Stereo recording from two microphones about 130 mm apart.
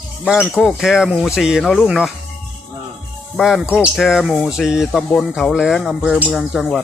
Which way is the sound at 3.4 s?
5° right (ahead or behind).